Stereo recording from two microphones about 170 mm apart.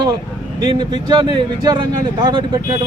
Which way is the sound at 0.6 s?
25° right (ahead or behind).